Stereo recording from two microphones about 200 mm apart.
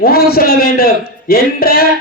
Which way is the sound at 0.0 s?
50° left (ahead or behind).